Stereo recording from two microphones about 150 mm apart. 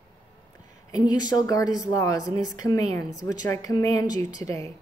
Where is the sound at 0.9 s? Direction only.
25° left (ahead or behind).